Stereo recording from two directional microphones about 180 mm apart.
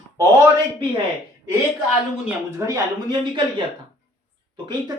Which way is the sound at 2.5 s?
15° right (ahead or behind).